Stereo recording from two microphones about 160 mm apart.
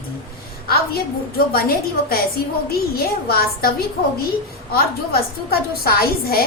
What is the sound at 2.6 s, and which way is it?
A woman's voice, 70° left (ahead or behind).